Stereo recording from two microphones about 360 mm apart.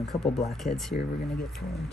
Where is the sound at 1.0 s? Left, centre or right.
Centre.